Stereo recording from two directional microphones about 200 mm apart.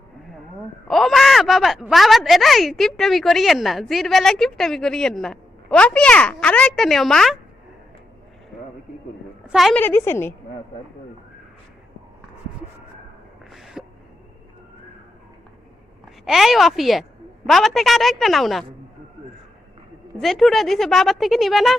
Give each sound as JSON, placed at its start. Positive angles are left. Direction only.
{"t": 0.9, "sound": "speech", "side_deg": 0}
{"t": 9.5, "sound": "a woman's voice", "side_deg": 0}
{"t": 13.5, "sound": "a sound", "side_deg": 0}
{"t": 16.2, "sound": "speech", "side_deg": 0}
{"t": 20.2, "sound": "speech", "side_deg": 0}